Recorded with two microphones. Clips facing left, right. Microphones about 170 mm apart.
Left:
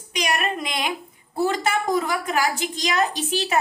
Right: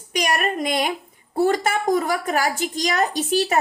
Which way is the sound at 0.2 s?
45° right (ahead or behind).